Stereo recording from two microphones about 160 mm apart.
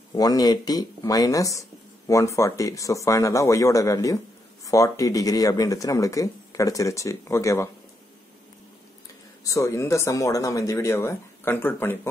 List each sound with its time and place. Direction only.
0.1 s speech: 25° left (ahead or behind)
9.4 s speech: 20° left (ahead or behind)